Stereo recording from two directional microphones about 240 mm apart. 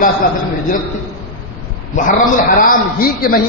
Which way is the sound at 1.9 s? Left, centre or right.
Left.